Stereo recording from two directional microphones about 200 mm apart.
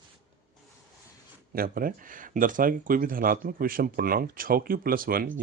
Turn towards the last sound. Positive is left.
turn(degrees=-45)  # may be behind; listen again after turning